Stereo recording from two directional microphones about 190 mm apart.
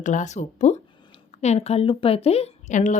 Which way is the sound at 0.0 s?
40° left (ahead or behind).